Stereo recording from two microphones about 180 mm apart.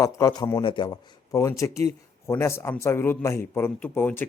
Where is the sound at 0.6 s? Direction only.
25° left (ahead or behind).